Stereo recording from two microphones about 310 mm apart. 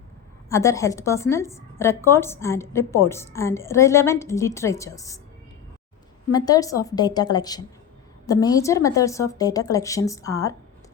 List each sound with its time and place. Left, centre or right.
0.5 s a woman's voice: centre
6.3 s a woman's voice: centre